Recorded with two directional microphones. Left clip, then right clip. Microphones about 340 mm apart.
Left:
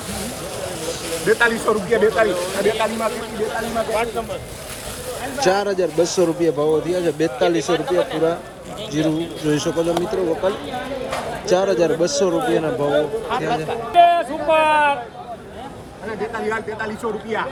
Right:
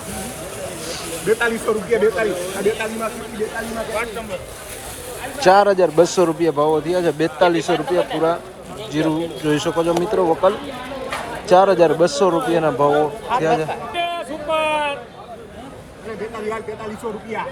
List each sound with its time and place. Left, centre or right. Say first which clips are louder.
1.2 s speech: left 2 dB; centre
5.4 s speech: right 6 dB; centre
13.9 s a sound: left 15 dB; left